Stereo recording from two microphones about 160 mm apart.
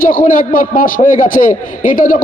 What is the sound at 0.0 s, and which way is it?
A man's voice, 60° left (ahead or behind).